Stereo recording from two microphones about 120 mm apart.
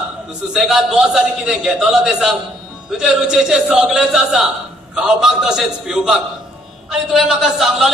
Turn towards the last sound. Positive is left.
turn(degrees=0)  # may be behind; listen again after turning